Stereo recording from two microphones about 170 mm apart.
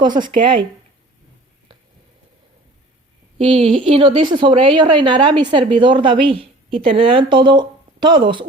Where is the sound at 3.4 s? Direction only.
35° right (ahead or behind).